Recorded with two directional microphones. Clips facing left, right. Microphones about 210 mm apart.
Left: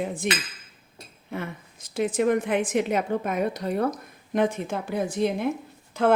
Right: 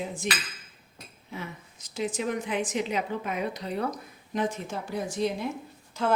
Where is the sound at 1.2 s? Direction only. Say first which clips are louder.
Left 6 dB; 55° left (ahead or behind).